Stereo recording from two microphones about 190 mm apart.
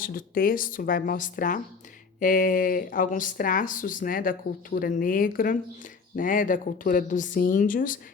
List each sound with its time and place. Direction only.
0.0 s speech: 50° left (ahead or behind)